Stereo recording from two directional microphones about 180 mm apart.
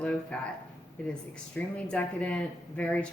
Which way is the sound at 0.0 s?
5° left (ahead or behind).